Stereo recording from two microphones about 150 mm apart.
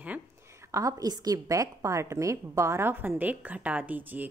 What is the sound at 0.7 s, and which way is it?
A woman's voice, 20° right (ahead or behind).